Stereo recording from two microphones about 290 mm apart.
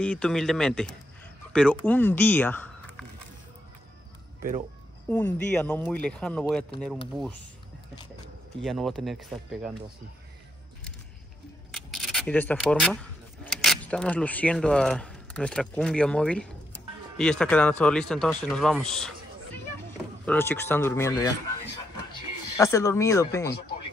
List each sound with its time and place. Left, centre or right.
0.0 s speech: centre
4.4 s speech: right
5.1 s speech: centre
8.6 s speech: centre
11.7 s speech: centre
22.6 s speech: centre